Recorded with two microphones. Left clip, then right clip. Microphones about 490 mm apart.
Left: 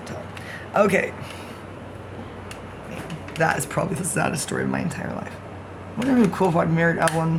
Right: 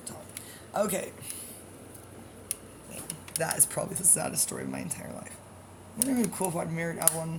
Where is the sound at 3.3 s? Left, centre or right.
Right.